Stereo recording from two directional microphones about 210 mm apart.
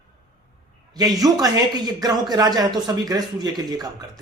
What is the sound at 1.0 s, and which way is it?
Speech, 15° right (ahead or behind).